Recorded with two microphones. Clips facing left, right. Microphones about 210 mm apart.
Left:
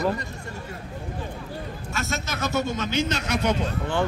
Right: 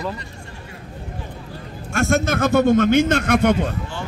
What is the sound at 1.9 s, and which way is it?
A man's voice, 50° right (ahead or behind).